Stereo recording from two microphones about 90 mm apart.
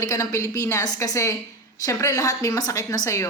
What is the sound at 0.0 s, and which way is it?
A woman's voice, 35° left (ahead or behind).